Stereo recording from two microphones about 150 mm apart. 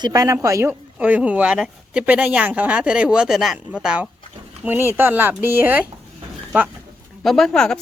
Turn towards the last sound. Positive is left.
turn(degrees=5)  # may be behind; listen again after turning